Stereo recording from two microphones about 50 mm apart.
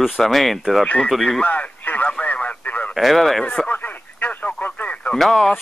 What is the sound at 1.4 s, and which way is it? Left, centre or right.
Speech, left.